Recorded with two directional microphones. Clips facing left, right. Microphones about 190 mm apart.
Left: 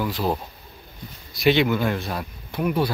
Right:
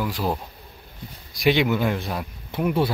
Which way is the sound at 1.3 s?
15° right (ahead or behind).